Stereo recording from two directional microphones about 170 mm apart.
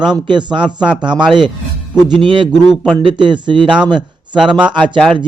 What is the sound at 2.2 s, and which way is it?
Speech, 30° right (ahead or behind).